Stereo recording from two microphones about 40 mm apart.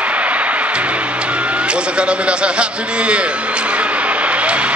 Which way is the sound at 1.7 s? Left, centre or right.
Right.